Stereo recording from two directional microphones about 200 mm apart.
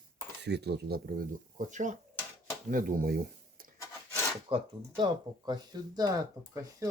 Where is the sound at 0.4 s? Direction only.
55° right (ahead or behind).